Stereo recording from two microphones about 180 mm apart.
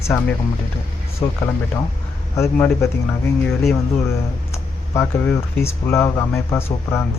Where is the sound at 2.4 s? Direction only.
15° left (ahead or behind).